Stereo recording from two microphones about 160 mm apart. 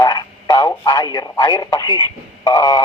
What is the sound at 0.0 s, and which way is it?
Radio, 25° left (ahead or behind).